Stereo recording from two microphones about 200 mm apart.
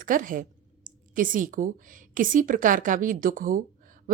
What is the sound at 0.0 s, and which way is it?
A woman's voice, 40° right (ahead or behind).